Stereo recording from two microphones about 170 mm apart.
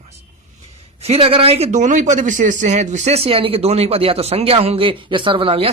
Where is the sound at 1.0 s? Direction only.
35° right (ahead or behind).